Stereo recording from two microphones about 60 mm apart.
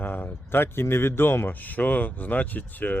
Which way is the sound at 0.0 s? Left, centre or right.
Left.